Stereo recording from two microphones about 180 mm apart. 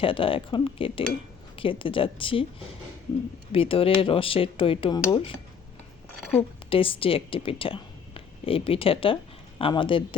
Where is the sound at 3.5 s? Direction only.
30° left (ahead or behind).